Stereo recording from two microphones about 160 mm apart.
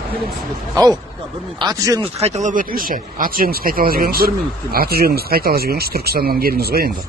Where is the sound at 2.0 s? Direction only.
45° right (ahead or behind).